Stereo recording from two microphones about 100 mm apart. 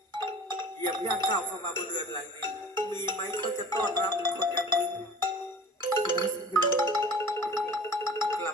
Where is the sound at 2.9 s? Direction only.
50° right (ahead or behind).